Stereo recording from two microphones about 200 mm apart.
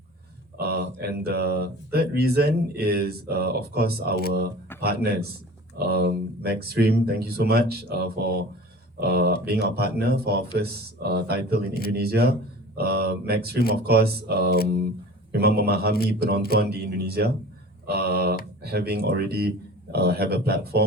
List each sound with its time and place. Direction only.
0.5 s speech: 55° right (ahead or behind)